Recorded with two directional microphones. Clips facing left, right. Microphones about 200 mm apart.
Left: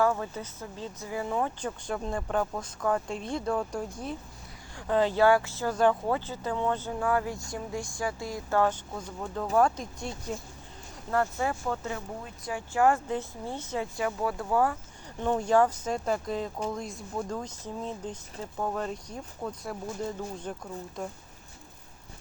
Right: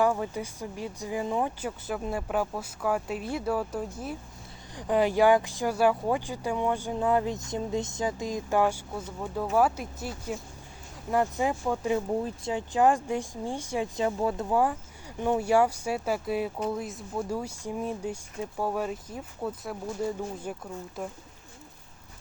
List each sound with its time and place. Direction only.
0.0 s speech: 15° right (ahead or behind)